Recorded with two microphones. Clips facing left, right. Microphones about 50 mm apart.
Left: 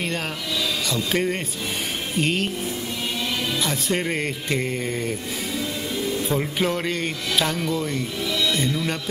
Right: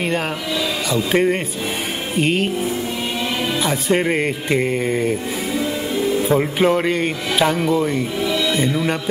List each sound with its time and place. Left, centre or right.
0.9 s speech: centre
3.6 s speech: centre